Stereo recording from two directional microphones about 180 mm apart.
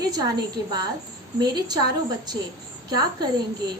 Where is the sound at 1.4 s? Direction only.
20° right (ahead or behind).